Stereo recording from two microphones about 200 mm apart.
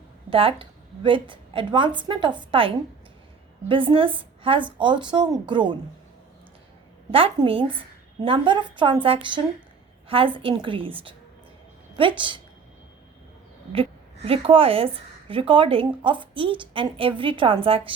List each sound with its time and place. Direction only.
0.3 s speech: 25° right (ahead or behind)
7.1 s speech: 30° right (ahead or behind)
14.3 s speech: 30° right (ahead or behind)